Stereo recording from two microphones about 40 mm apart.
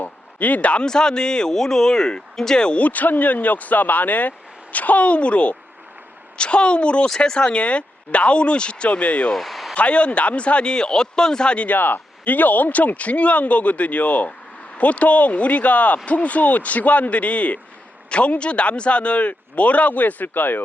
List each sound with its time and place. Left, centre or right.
0.0 s a sound: left
0.9 s speech: centre
2.7 s speech: left
9.3 s a sound: centre
9.7 s speech: left
11.7 s speech: left